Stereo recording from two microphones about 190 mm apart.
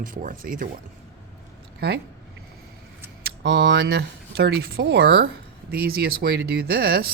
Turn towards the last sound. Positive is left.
turn(degrees=-55)  # may be behind; listen again after turning